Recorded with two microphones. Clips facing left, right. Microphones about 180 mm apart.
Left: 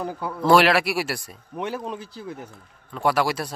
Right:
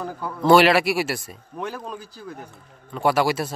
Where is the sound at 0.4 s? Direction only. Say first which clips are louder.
Right 2 dB; centre (ahead or behind).